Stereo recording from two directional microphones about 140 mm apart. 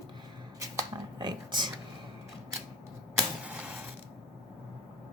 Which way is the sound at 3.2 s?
10° right (ahead or behind).